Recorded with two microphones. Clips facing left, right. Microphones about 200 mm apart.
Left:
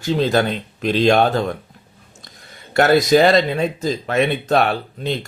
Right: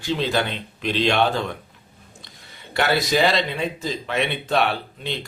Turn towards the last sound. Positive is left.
turn(degrees=45)  # may be behind; listen again after turning